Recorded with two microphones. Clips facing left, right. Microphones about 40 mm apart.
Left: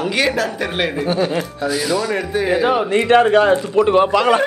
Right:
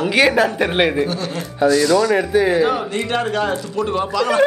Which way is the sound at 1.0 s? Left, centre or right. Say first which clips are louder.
Left 6 dB; centre.